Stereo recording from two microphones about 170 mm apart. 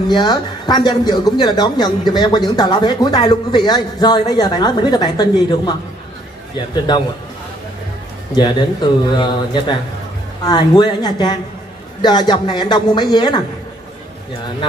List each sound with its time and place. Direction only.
0.1 s speech: 25° left (ahead or behind)
6.9 s speech: 25° left (ahead or behind)
8.4 s speech: 25° left (ahead or behind)